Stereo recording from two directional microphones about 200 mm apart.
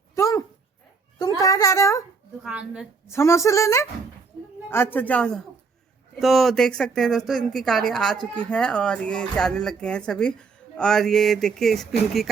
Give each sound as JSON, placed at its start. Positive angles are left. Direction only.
{"t": 0.2, "sound": "dog", "side_deg": 15}
{"t": 1.4, "sound": "a child's voice", "side_deg": 15}
{"t": 2.4, "sound": "speech", "side_deg": -5}
{"t": 3.1, "sound": "speech", "side_deg": 15}